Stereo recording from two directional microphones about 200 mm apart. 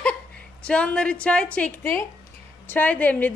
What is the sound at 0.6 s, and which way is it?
A woman's voice, 5° left (ahead or behind).